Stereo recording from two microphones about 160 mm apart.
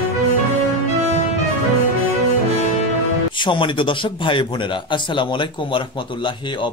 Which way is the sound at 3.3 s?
30° left (ahead or behind).